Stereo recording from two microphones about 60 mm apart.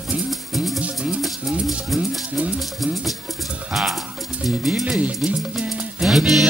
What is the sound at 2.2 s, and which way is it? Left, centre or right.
Music, centre.